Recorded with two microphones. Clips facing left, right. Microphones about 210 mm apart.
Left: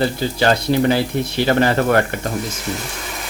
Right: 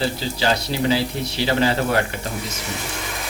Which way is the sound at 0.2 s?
55° left (ahead or behind).